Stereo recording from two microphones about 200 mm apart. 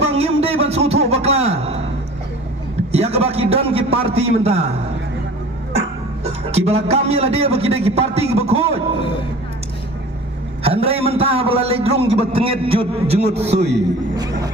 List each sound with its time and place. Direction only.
0.1 s a sound: 30° right (ahead or behind)
2.9 s a man's voice: 30° right (ahead or behind)
6.2 s a man's voice: 30° right (ahead or behind)
10.6 s a man's voice: 30° right (ahead or behind)
14.2 s music: 15° right (ahead or behind)